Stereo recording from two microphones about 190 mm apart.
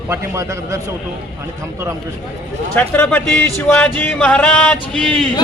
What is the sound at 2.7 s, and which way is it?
Speech, 10° left (ahead or behind).